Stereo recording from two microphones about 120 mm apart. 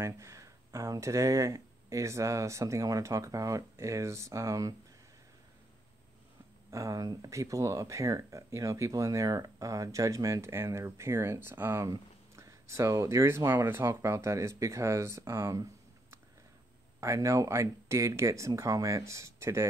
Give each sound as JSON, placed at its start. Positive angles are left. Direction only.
{"t": 0.0, "sound": "speech", "side_deg": -25}
{"t": 6.7, "sound": "speech", "side_deg": -30}
{"t": 17.0, "sound": "speech", "side_deg": -25}